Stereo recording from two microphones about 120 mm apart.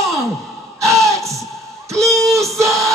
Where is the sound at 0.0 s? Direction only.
25° right (ahead or behind).